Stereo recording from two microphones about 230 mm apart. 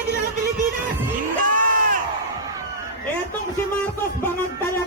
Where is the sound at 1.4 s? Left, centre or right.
Right.